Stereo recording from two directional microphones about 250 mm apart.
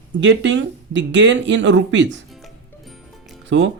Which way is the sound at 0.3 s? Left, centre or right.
Right.